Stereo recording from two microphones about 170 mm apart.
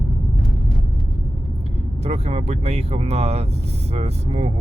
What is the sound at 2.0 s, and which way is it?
Speech, 40° right (ahead or behind).